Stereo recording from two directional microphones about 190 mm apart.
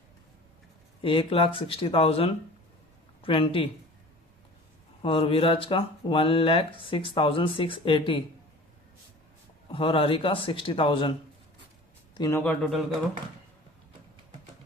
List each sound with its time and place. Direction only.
1.0 s speech: 30° left (ahead or behind)
5.0 s speech: 30° left (ahead or behind)
9.7 s speech: 30° left (ahead or behind)
12.1 s a man's voice: 20° left (ahead or behind)
12.4 s a man's voice: centre (ahead or behind)